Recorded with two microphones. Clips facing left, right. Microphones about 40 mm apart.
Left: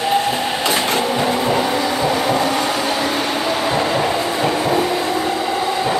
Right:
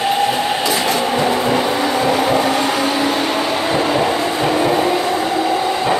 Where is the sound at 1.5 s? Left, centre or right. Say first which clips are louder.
Right 2 dB; centre.